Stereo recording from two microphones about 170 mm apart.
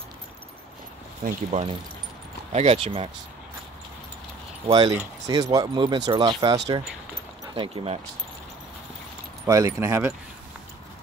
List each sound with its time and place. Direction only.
1.5 s speech: 40° right (ahead or behind)
4.6 s speech: 25° right (ahead or behind)
7.5 s speech: 35° right (ahead or behind)
9.5 s speech: 20° right (ahead or behind)